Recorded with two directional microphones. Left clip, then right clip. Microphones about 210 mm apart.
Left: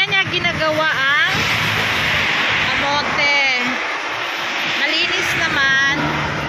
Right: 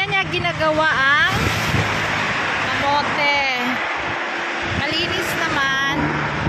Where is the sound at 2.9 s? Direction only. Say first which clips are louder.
Left 1 dB; centre (ahead or behind).